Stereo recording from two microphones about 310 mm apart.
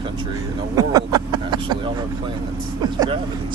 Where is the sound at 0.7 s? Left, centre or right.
Centre.